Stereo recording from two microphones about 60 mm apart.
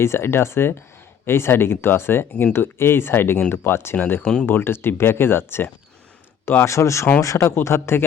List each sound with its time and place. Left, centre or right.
0.0 s speech: left
3.9 s speech: left